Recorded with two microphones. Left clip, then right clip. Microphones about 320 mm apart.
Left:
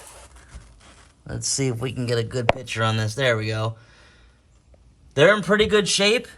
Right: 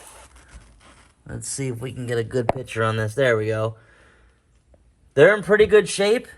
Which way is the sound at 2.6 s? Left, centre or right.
Centre.